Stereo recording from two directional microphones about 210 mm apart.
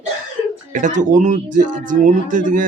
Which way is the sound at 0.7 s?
35° right (ahead or behind).